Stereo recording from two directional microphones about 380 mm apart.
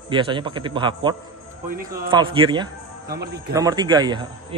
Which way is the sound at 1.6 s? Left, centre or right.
Right.